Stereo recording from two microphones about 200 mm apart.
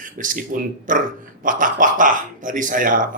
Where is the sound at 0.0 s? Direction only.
40° right (ahead or behind).